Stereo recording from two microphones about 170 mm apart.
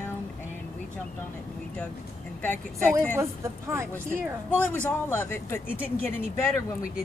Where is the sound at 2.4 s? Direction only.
10° left (ahead or behind).